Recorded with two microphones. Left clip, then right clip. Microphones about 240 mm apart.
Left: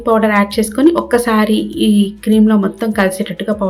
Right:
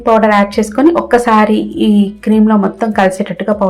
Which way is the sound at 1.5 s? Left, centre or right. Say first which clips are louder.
Right 2 dB; centre.